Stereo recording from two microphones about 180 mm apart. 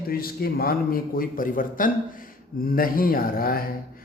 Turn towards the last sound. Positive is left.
turn(degrees=55)  # may be behind; listen again after turning